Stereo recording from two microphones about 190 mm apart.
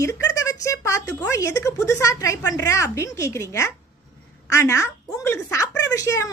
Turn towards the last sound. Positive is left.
turn(degrees=15)  # may be behind; listen again after turning